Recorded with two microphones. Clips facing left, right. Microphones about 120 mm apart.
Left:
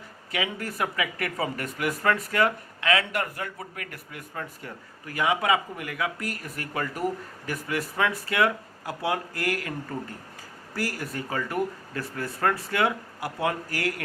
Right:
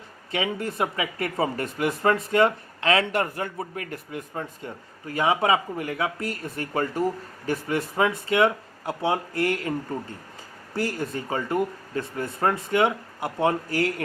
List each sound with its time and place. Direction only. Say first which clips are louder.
0.3 s speech: right 3 dB; 30° right (ahead or behind)
10.8 s speech: right 4 dB; 25° right (ahead or behind)